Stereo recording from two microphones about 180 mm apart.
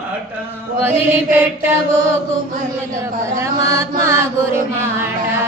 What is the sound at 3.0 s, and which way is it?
Chant, 15° right (ahead or behind).